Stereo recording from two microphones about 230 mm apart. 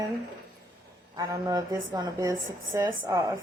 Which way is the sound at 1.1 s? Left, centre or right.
Centre.